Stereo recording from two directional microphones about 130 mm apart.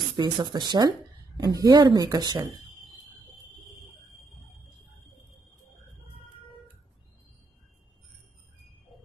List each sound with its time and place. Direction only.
0.2 s speech: 35° right (ahead or behind)